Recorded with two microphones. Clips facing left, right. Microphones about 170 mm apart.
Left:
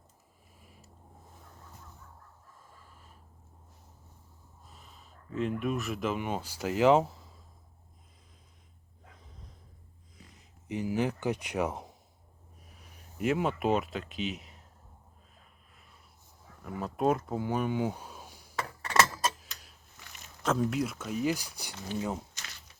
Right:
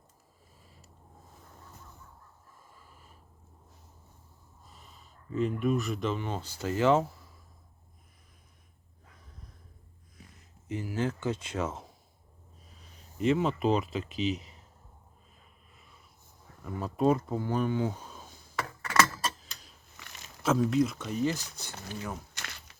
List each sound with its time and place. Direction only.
4.7 s speech: centre (ahead or behind)
9.1 s snort: 20° left (ahead or behind)
10.2 s a sound: 20° left (ahead or behind)
12.6 s speech: 10° left (ahead or behind)
16.6 s speech: 5° left (ahead or behind)
18.5 s a sound: 30° left (ahead or behind)
19.1 s clock: 5° left (ahead or behind)
20.0 s a sound: 90° right
20.4 s speech: centre (ahead or behind); by 22.2 s 20° left (ahead or behind)